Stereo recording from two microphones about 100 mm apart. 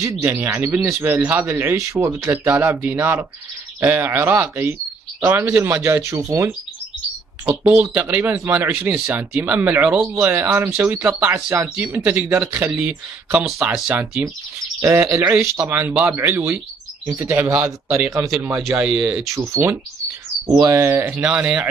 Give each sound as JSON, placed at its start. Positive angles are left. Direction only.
{"t": 0.2, "sound": "speech", "side_deg": -25}
{"t": 7.9, "sound": "speech", "side_deg": -15}
{"t": 14.8, "sound": "speech", "side_deg": -30}
{"t": 18.8, "sound": "speech", "side_deg": -10}
{"t": 19.3, "sound": "speech", "side_deg": -30}
{"t": 21.3, "sound": "speech", "side_deg": -10}